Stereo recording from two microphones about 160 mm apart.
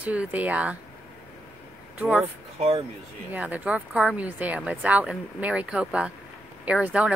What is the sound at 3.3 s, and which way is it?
Speech, 10° right (ahead or behind).